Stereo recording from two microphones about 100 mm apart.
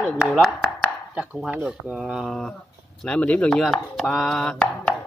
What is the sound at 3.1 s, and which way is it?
Speech, 15° left (ahead or behind).